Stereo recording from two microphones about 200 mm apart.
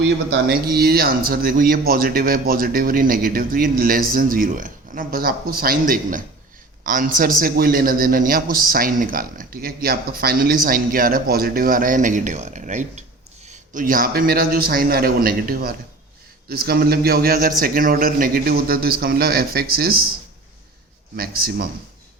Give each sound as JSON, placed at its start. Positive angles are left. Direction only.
{"t": 0.6, "sound": "a man's voice", "side_deg": -50}
{"t": 21.2, "sound": "a man's voice", "side_deg": -50}